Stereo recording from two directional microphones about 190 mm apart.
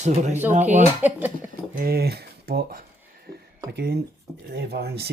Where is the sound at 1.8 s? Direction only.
55° right (ahead or behind).